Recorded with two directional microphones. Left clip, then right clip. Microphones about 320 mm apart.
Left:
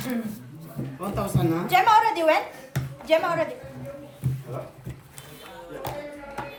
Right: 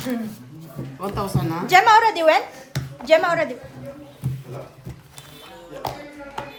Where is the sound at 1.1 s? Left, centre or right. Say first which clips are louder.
Left 1 dB; right.